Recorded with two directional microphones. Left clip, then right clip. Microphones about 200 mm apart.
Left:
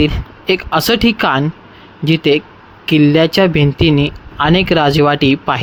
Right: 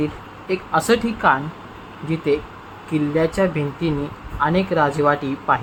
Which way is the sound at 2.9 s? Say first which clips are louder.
Left 9 dB; 50° left (ahead or behind).